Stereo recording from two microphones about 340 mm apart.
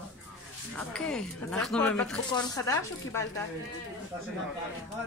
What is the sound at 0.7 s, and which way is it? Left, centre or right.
Speech, centre.